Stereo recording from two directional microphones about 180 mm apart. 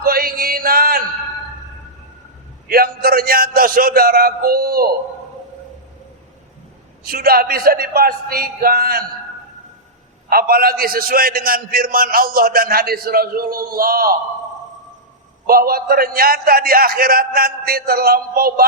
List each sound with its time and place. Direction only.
0.0 s music: 55° right (ahead or behind)
2.6 s a man's voice: 55° right (ahead or behind)
7.0 s a man's voice: 55° right (ahead or behind)
10.2 s a man's voice: 55° right (ahead or behind)
15.4 s a man's voice: 55° right (ahead or behind)